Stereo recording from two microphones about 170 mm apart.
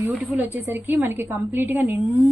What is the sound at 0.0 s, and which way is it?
A woman's voice, 10° right (ahead or behind).